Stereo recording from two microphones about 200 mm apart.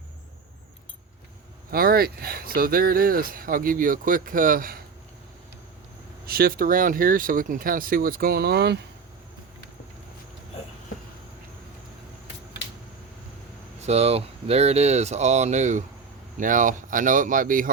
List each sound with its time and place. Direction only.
1.7 s speech: 50° right (ahead or behind)
6.2 s speech: 45° right (ahead or behind)
13.8 s speech: 30° right (ahead or behind)